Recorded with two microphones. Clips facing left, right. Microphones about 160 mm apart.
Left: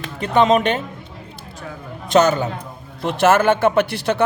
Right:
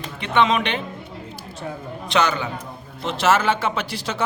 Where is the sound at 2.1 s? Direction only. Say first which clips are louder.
Left 6 dB; 45° left (ahead or behind).